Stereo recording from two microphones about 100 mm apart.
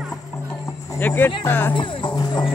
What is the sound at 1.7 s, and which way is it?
Speech, 55° left (ahead or behind).